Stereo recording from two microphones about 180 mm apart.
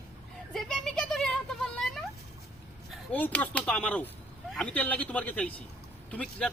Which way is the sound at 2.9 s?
10° left (ahead or behind).